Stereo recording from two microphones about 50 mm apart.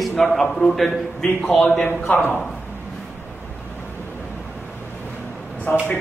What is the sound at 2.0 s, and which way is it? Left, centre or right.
Speech, left.